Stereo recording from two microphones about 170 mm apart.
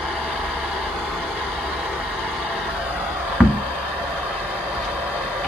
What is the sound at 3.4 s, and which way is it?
Knock, 5° left (ahead or behind).